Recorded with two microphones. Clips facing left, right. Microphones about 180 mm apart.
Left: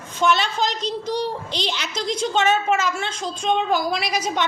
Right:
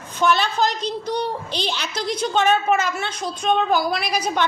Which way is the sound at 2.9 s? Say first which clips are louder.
Right 1 dB; 25° left (ahead or behind).